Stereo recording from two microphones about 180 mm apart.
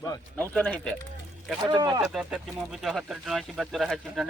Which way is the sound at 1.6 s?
25° right (ahead or behind).